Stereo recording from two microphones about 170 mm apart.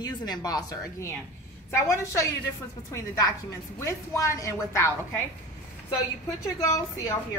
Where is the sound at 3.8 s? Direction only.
20° left (ahead or behind).